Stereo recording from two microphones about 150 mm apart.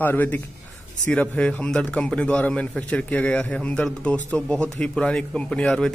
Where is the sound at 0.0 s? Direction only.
10° left (ahead or behind).